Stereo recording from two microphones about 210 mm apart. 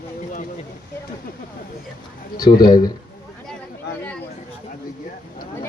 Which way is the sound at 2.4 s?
20° left (ahead or behind).